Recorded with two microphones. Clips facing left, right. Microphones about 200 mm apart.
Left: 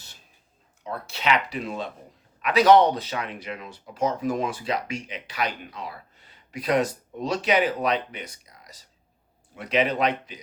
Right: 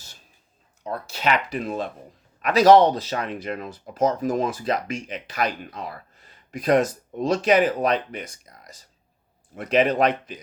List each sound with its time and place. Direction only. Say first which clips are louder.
0.9 s speech: right 1 dB; 45° right (ahead or behind)